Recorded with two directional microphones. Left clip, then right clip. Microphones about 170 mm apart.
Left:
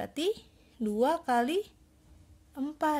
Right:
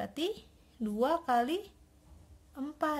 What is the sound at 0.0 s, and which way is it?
A woman's voice, 50° left (ahead or behind).